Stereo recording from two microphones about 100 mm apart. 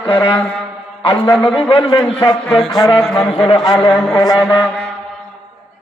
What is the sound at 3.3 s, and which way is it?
Speech, 90° left.